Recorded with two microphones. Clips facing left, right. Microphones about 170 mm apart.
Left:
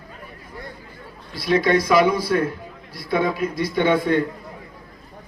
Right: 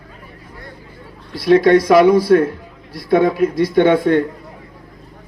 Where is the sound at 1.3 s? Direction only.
70° right (ahead or behind).